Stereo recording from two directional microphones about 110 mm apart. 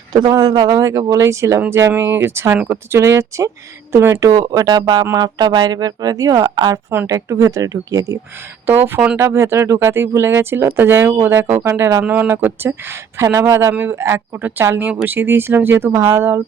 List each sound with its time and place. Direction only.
0.1 s speech: 35° right (ahead or behind)
8.6 s speech: 20° right (ahead or behind)
12.0 s speech: 15° right (ahead or behind)